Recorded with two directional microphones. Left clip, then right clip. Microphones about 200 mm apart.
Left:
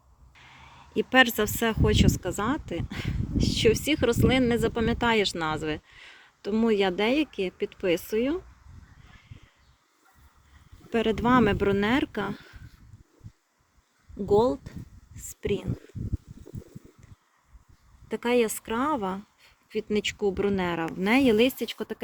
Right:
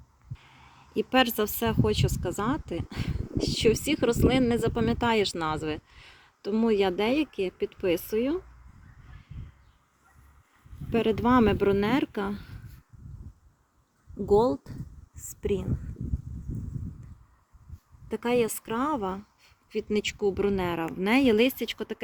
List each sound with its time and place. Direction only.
0.3 s speech: 5° right (ahead or behind)
10.8 s speech: 10° right (ahead or behind)
14.3 s speech: 10° right (ahead or behind)
18.1 s speech: centre (ahead or behind)